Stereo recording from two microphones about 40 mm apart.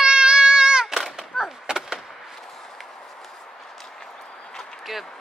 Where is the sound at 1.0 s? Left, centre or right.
Centre.